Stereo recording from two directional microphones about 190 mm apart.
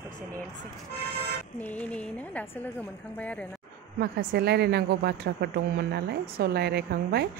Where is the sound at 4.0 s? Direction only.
55° right (ahead or behind).